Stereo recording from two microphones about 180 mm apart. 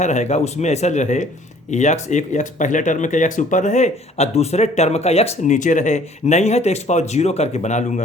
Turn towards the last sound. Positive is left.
turn(degrees=40)  # may be behind; listen again after turning